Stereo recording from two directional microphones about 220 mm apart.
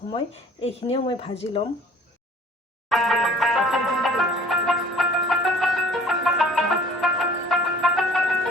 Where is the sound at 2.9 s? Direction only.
Centre (ahead or behind).